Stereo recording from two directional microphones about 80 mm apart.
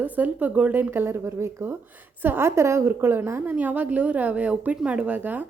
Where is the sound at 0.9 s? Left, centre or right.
Right.